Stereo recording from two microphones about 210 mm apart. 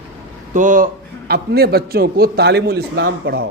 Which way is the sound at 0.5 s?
40° right (ahead or behind).